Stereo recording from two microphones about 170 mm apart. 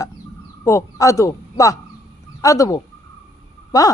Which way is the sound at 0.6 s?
15° left (ahead or behind).